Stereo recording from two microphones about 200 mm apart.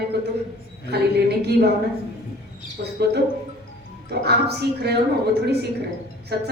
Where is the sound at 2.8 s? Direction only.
55° right (ahead or behind).